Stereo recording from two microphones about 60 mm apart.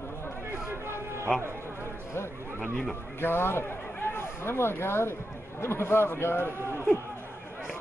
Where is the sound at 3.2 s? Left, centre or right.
Left.